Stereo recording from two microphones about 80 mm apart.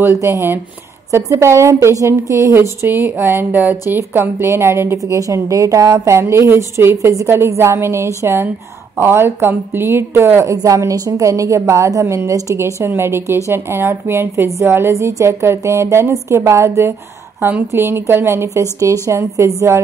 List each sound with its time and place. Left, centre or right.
0.2 s a woman's voice: right
4.9 s a woman's voice: right
10.5 s a woman's voice: right